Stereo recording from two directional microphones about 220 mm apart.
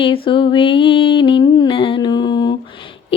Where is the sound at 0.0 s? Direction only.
25° left (ahead or behind).